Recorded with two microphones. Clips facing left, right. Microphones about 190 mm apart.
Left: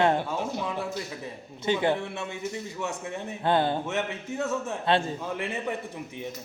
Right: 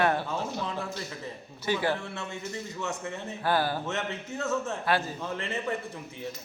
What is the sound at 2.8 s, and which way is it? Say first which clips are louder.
Speech: left 2 dB; 15° left (ahead or behind).